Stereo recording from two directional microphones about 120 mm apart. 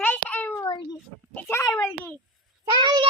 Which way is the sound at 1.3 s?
25° left (ahead or behind).